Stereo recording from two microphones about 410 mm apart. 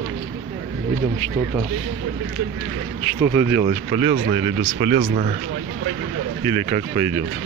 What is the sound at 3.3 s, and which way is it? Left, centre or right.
Speech, centre.